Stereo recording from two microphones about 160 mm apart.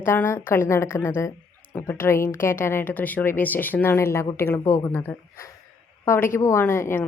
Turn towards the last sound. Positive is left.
turn(degrees=15)  # may be behind; listen again after turning